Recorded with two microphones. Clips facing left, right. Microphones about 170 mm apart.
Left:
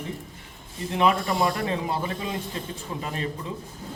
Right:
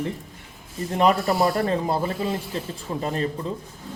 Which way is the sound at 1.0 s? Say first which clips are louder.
Right 3 dB; 40° right (ahead or behind).